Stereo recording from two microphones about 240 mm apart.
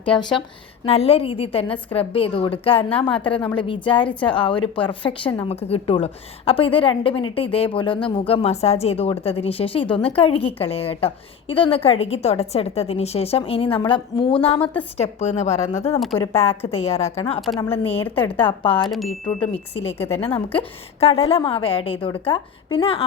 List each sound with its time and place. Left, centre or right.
0.0 s a woman's voice: left
14.6 s a woman's voice: centre
14.9 s a woman's voice: left
16.0 s speech: centre
16.4 s a woman's voice: left
18.9 s speech: centre
19.4 s a woman's voice: left